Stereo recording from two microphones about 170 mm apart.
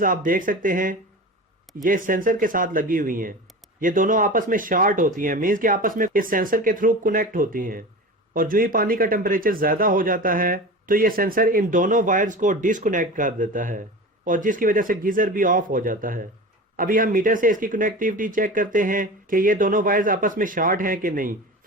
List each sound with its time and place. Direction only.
0.0 s speech: 55° right (ahead or behind)